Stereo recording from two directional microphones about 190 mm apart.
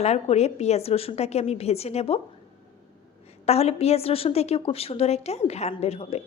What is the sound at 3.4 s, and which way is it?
A woman's voice, 35° left (ahead or behind).